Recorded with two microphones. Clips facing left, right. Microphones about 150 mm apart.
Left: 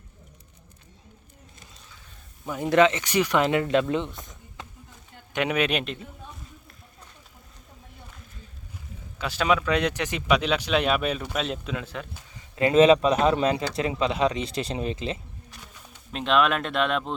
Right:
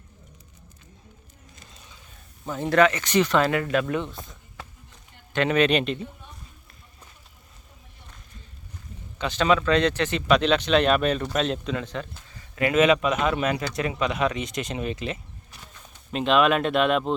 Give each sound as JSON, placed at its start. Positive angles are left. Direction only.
{"t": 2.5, "sound": "speech", "side_deg": 15}
{"t": 5.3, "sound": "speech", "side_deg": 10}
{"t": 9.1, "sound": "speech", "side_deg": 5}
{"t": 12.3, "sound": "speech", "side_deg": 20}
{"t": 16.1, "sound": "speech", "side_deg": 0}